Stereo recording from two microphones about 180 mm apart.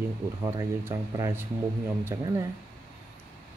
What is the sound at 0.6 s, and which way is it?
Speech, 15° right (ahead or behind).